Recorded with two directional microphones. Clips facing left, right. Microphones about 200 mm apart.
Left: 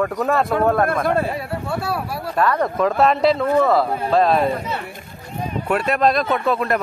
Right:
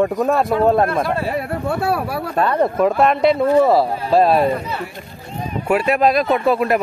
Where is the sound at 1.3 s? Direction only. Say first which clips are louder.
Right 4 dB; 60° right (ahead or behind).